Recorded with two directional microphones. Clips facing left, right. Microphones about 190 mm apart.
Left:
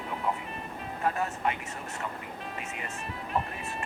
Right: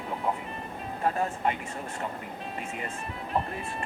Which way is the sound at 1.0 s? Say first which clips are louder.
Right 2 dB; 30° right (ahead or behind).